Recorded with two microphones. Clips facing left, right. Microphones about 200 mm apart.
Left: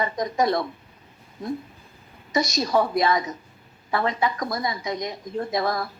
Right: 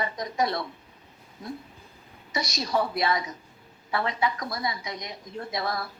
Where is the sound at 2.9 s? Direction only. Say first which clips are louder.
Left 5 dB; 45° left (ahead or behind).